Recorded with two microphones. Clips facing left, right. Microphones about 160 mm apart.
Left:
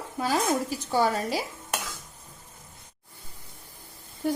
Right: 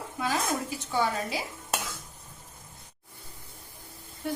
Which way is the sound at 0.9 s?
40° left (ahead or behind).